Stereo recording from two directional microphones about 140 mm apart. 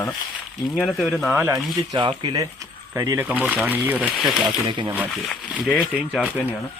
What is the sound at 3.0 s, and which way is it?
Speech, 15° right (ahead or behind).